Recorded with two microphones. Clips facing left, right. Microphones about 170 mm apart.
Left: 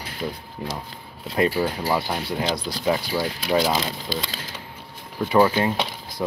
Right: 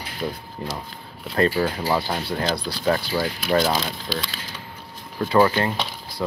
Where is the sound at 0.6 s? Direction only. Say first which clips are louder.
Even; 5° left (ahead or behind).